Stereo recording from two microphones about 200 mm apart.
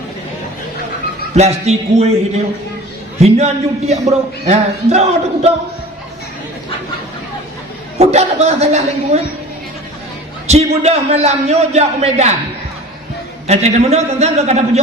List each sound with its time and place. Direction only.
1.4 s a man's voice: 30° right (ahead or behind)
3.2 s a man's voice: 30° right (ahead or behind)
7.9 s a man's voice: 30° right (ahead or behind)
10.4 s a man's voice: 30° right (ahead or behind)
13.5 s a man's voice: 35° right (ahead or behind)